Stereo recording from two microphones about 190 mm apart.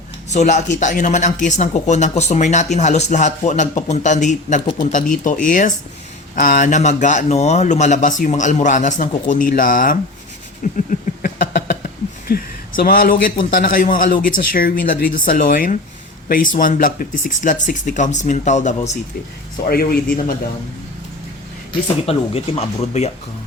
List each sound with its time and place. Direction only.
0.3 s a man's voice: 40° left (ahead or behind)
10.8 s a sound: 45° left (ahead or behind)
12.3 s a man's voice: 50° left (ahead or behind)
19.6 s a man's voice: 50° left (ahead or behind)
21.7 s speech: 30° left (ahead or behind)